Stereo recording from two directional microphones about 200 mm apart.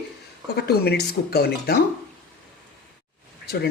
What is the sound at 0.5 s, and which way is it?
Speech, 55° left (ahead or behind).